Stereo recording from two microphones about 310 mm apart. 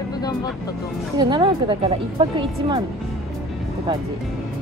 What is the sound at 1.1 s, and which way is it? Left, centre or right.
Speech, centre.